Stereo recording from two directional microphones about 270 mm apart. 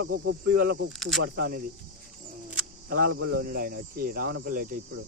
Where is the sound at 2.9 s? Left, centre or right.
Right.